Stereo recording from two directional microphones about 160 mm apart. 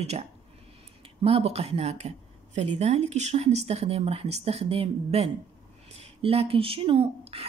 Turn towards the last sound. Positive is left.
turn(degrees=-35)  # may be behind; listen again after turning